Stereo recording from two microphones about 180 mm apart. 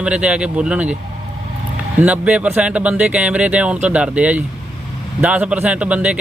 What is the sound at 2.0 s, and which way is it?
Speech, 10° right (ahead or behind).